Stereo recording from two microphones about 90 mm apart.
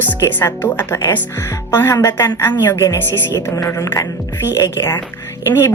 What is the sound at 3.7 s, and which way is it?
A woman's voice, 35° left (ahead or behind).